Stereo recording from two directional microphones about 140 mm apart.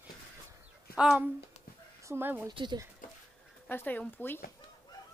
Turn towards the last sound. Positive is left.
turn(degrees=15)  # may be behind; listen again after turning